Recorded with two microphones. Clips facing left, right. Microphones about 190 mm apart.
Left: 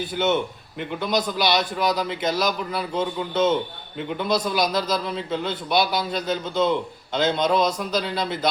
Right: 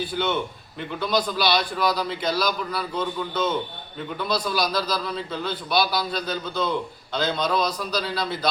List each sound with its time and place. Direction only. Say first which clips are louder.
0.9 s a man's voice: even; 20° left (ahead or behind)